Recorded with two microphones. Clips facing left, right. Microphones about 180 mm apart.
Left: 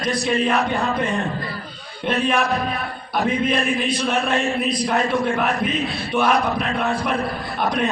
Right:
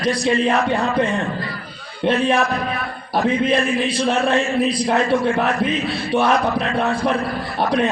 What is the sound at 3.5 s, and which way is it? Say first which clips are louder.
Speech: right 3 dB; 30° right (ahead or behind).